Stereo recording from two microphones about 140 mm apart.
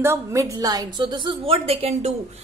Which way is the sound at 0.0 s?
20° right (ahead or behind).